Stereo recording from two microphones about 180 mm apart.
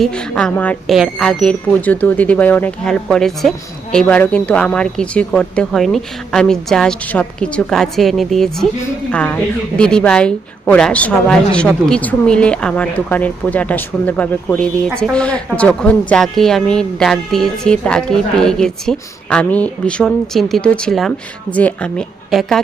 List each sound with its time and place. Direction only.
0.0 s speech: 5° left (ahead or behind)